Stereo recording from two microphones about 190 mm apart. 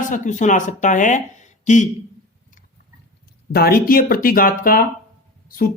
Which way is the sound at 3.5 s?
55° left (ahead or behind).